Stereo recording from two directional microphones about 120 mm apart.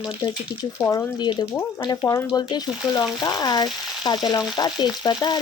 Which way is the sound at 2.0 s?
20° left (ahead or behind).